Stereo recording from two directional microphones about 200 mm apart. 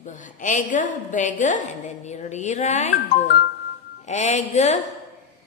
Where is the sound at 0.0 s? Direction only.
40° left (ahead or behind).